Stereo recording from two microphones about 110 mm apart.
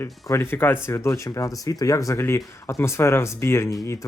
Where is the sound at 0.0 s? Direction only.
20° left (ahead or behind).